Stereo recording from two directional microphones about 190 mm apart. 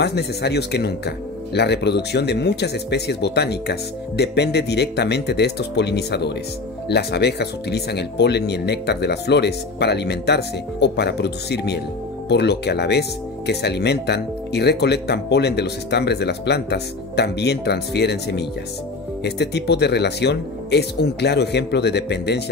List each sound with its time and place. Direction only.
0.0 s speech: 60° left (ahead or behind)